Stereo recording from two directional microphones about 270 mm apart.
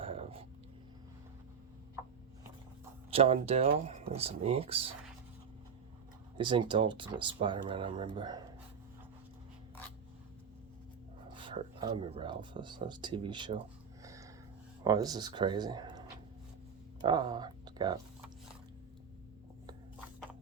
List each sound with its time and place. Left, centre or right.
0.0 s a sound: right
3.1 s speech: right
6.3 s speech: centre
11.3 s speech: centre
14.0 s a sound: centre
14.8 s speech: centre